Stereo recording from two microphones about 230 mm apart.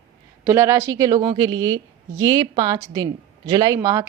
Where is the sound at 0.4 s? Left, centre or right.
Centre.